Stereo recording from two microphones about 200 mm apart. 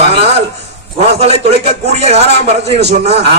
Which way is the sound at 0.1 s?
30° right (ahead or behind).